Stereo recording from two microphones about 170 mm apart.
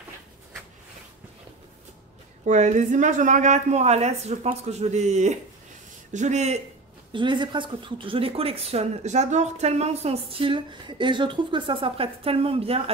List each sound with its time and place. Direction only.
2.4 s speech: 45° right (ahead or behind)
7.1 s a woman's voice: 30° right (ahead or behind)